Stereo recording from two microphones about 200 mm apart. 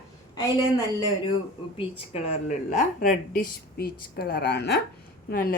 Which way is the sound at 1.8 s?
30° left (ahead or behind).